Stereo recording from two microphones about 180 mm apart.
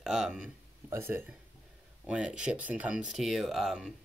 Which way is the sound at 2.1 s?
5° right (ahead or behind).